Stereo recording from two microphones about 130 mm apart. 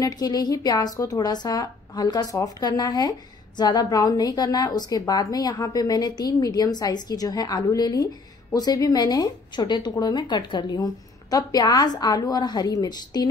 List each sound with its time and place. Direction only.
0.0 s a woman's voice: 30° left (ahead or behind)